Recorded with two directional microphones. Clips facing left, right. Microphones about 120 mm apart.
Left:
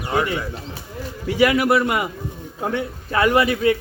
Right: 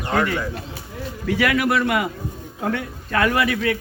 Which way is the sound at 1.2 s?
20° left (ahead or behind).